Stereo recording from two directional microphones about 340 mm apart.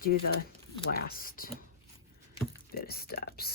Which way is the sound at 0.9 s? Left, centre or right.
Left.